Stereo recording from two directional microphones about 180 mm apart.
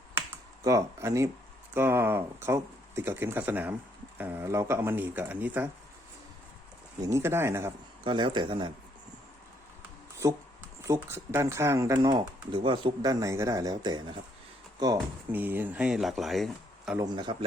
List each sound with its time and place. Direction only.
0.1 s computer keyboard: 15° right (ahead or behind)
1.7 s speech: 15° right (ahead or behind)
7.0 s speech: 15° right (ahead or behind)
8.0 s speech: 25° right (ahead or behind)
10.8 s speech: 15° right (ahead or behind)
15.3 s speech: 10° right (ahead or behind)
17.0 s speech: 25° right (ahead or behind)